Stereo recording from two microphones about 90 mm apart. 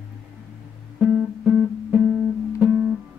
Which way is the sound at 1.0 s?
15° right (ahead or behind).